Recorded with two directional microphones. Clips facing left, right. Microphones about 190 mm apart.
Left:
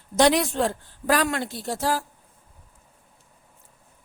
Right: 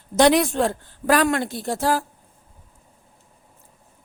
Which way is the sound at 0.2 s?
55° right (ahead or behind).